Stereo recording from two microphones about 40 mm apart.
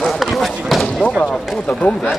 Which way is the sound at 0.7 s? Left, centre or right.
Centre.